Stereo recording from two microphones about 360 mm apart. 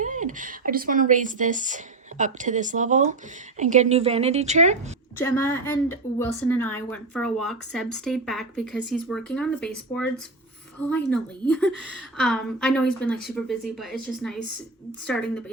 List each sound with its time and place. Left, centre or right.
0.0 s a woman's voice: right
5.1 s a woman's voice: centre